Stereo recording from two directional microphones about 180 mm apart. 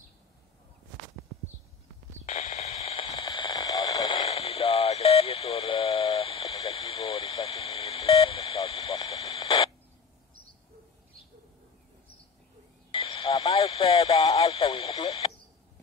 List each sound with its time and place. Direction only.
2.2 s radio: 40° left (ahead or behind)
3.3 s radio: 25° left (ahead or behind)
12.9 s radio: 30° left (ahead or behind)